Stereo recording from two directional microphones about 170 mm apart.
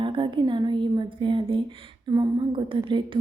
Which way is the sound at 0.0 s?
30° right (ahead or behind).